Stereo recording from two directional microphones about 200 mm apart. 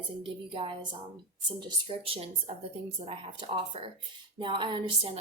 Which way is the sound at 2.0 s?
30° right (ahead or behind).